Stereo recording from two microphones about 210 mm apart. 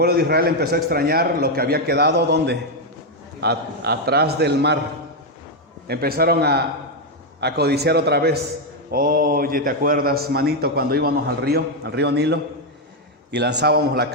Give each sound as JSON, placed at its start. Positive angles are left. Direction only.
{"t": 0.0, "sound": "a man's voice", "side_deg": -45}
{"t": 5.9, "sound": "a man's voice", "side_deg": -45}